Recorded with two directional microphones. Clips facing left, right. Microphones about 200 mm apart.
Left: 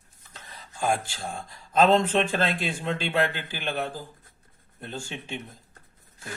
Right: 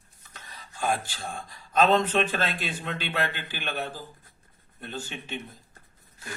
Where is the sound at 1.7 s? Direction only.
25° left (ahead or behind).